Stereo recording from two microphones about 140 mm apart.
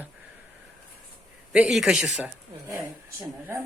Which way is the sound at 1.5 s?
5° right (ahead or behind).